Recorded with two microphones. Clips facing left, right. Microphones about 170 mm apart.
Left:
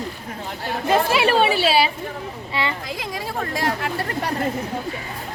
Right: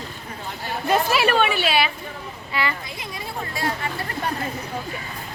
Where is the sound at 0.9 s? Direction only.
25° left (ahead or behind).